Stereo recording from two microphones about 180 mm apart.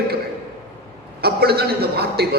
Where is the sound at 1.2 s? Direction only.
60° right (ahead or behind).